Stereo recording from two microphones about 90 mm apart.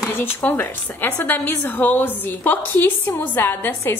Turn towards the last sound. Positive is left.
turn(degrees=25)  # may be behind; listen again after turning